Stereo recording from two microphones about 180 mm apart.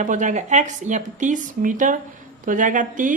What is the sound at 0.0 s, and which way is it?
A woman's voice, 45° right (ahead or behind).